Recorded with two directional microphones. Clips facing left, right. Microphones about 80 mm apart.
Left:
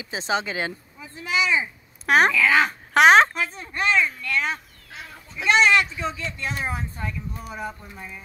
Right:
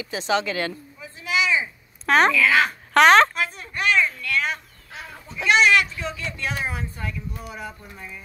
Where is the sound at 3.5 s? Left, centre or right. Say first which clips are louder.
Even; left.